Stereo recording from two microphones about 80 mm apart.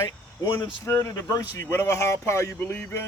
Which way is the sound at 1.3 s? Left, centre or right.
Left.